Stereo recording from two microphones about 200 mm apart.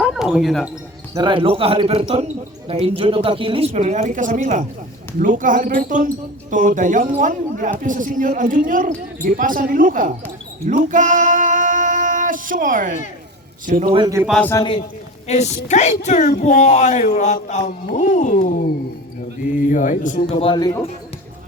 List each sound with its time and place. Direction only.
0.0 s basketball bounce: centre (ahead or behind)
1.1 s speech: 25° right (ahead or behind); by 10.2 s 45° right (ahead or behind)
10.7 s female singing: 40° right (ahead or behind)
13.7 s speech: 40° right (ahead or behind)
13.9 s speech: 20° right (ahead or behind)
14.2 s a man's voice: centre (ahead or behind)
14.5 s a man's voice: 25° left (ahead or behind)
15.3 s speech: 35° left (ahead or behind)
16.0 s speech: 45° left (ahead or behind)
17.7 s speech: 50° left (ahead or behind)
18.1 s speech: 40° left (ahead or behind); by 20.8 s 20° left (ahead or behind)